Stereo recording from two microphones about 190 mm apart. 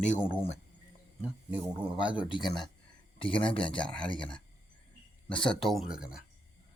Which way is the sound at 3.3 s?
5° left (ahead or behind).